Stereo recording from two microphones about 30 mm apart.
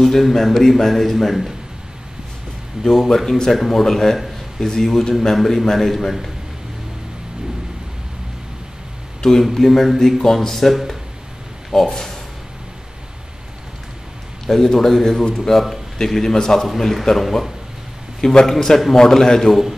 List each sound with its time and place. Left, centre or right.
0.0 s a man's voice: centre
2.8 s a man's voice: centre
9.4 s a man's voice: centre
11.9 s speech: centre
14.4 s speech: centre
16.6 s a man's voice: centre
18.2 s speech: centre